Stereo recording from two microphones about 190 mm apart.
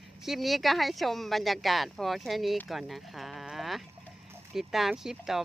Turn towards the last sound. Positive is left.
turn(degrees=0)  # may be behind; listen again after turning